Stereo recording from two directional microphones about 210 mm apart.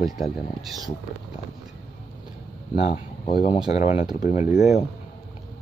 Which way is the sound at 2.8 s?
25° left (ahead or behind).